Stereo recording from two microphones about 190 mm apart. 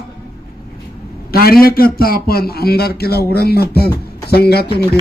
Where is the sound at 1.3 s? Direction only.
55° left (ahead or behind).